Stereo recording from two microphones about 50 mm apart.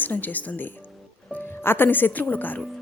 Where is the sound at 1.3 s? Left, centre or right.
Left.